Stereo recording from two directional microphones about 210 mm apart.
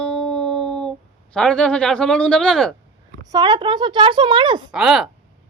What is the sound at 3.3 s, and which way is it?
Speech, 20° right (ahead or behind).